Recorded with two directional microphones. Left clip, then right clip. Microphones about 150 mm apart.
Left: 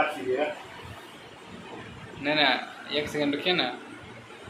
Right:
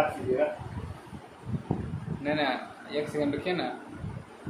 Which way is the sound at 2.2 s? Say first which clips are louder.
Left 5 dB; 10° right (ahead or behind).